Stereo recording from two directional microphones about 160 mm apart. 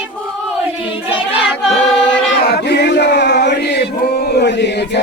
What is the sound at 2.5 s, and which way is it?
Chant, 90° left.